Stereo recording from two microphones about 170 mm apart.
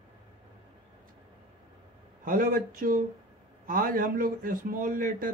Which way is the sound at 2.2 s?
55° right (ahead or behind).